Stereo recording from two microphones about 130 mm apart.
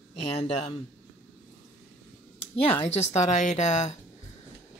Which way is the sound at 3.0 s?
60° left (ahead or behind).